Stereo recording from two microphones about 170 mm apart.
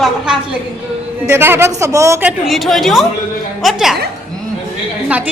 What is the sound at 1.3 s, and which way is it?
Speech, 15° right (ahead or behind).